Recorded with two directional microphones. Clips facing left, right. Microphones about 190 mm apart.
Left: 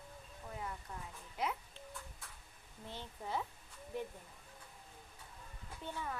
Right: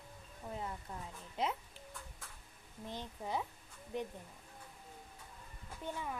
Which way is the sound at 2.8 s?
15° right (ahead or behind).